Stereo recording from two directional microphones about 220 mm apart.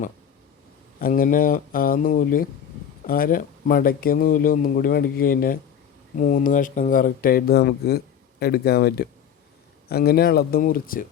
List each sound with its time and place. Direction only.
1.0 s speech: 40° left (ahead or behind)